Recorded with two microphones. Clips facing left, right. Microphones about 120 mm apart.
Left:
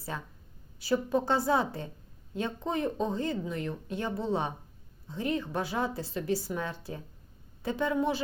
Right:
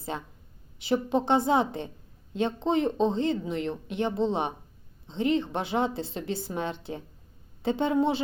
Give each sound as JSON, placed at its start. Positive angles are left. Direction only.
{"t": 0.1, "sound": "speech", "side_deg": -25}